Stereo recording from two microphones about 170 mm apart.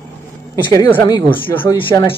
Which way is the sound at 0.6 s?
20° left (ahead or behind).